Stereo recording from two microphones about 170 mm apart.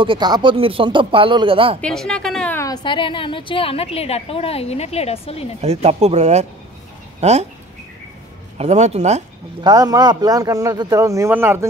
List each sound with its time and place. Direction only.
0.0 s a man's voice: 25° right (ahead or behind)
1.8 s a woman's voice: 5° left (ahead or behind)
2.5 s a woman's voice: 20° left (ahead or behind); by 5.5 s 35° left (ahead or behind)
5.6 s speech: 40° right (ahead or behind)
8.5 s speech: 40° right (ahead or behind)
9.6 s a man's voice: 25° right (ahead or behind)